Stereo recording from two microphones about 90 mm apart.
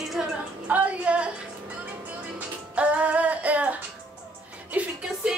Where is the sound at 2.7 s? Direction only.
15° right (ahead or behind).